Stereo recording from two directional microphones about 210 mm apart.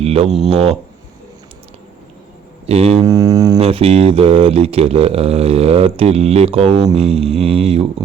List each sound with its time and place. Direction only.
0.0 s a sound: 30° right (ahead or behind)
0.3 s speech: centre (ahead or behind)
0.5 s mantra: 30° right (ahead or behind)
2.6 s mantra: 30° right (ahead or behind)
3.0 s mantra: 15° right (ahead or behind)
3.6 s mantra: 30° right (ahead or behind)